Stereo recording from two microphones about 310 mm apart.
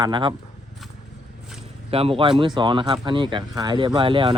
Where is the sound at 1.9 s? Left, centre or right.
Centre.